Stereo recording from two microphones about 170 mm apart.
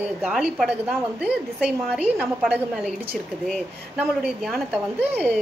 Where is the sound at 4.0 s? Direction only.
Centre (ahead or behind).